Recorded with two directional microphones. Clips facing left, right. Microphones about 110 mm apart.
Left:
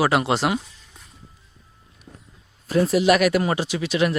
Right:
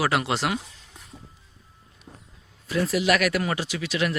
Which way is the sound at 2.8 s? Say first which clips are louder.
Left 5 dB; 25° left (ahead or behind).